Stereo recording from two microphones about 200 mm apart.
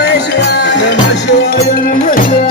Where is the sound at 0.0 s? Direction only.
60° left (ahead or behind).